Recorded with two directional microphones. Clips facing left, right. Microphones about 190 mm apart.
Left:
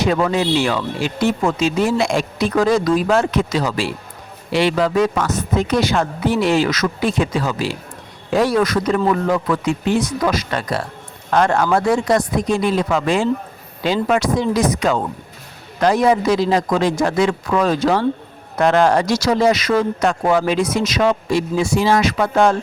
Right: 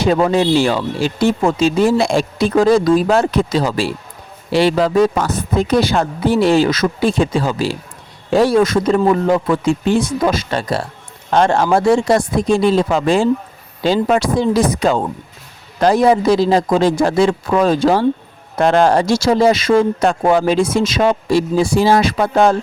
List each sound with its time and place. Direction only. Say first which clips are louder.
0.0 s speech: right 4 dB; 30° right (ahead or behind)